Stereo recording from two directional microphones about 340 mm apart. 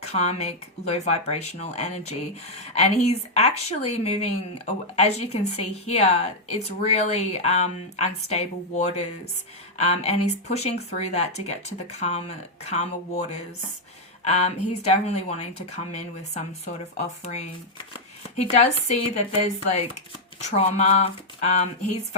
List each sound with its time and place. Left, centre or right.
0.0 s speech: centre
20.4 s speech: centre